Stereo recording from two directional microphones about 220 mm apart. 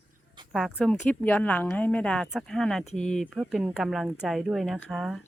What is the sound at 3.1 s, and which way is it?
Speech, centre (ahead or behind).